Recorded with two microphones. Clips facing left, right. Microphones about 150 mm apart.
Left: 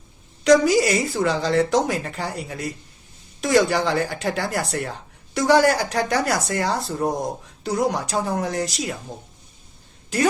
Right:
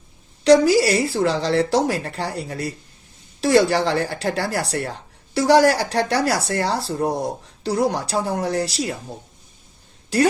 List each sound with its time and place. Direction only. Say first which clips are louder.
0.4 s speech: right 2 dB; 35° right (ahead or behind)